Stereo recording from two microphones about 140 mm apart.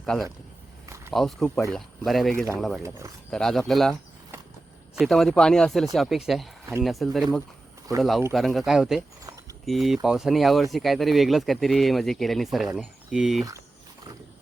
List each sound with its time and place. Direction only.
0.0 s speech: 5° left (ahead or behind)
0.9 s a sound: 20° right (ahead or behind)
1.1 s speech: centre (ahead or behind)
4.9 s speech: centre (ahead or behind)
8.3 s speech: centre (ahead or behind)
9.0 s a sound: 25° right (ahead or behind)
9.6 s speech: centre (ahead or behind)